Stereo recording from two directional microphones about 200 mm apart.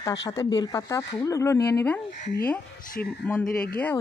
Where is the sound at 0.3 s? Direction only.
20° left (ahead or behind).